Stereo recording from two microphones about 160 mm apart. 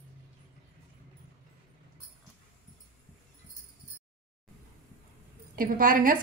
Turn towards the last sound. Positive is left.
turn(degrees=-60)  # may be behind; listen again after turning